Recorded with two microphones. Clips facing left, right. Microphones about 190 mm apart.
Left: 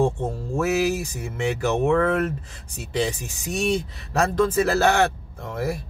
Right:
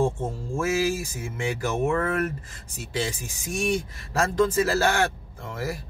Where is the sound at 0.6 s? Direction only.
65° left (ahead or behind).